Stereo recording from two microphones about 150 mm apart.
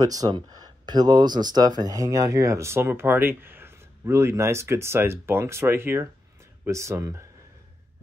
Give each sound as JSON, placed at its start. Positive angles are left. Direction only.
{"t": 0.0, "sound": "speech", "side_deg": -25}